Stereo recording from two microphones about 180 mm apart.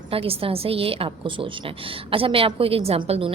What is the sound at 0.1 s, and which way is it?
A woman's voice, 30° right (ahead or behind).